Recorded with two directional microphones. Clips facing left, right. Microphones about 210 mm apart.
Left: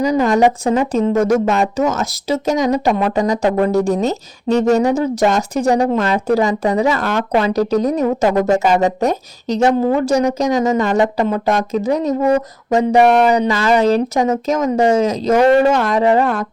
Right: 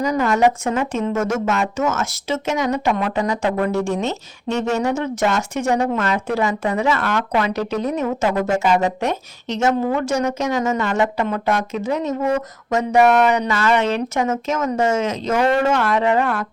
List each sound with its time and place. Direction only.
0.0 s speech: 35° left (ahead or behind)